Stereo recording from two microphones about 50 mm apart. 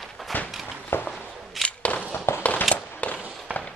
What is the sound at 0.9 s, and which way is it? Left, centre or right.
Walk, left.